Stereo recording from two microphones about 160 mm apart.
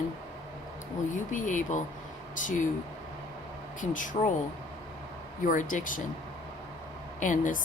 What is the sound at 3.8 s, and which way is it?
Speech, 55° left (ahead or behind).